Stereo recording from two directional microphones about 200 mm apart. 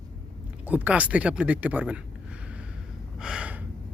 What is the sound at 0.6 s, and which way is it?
Speech, 10° right (ahead or behind).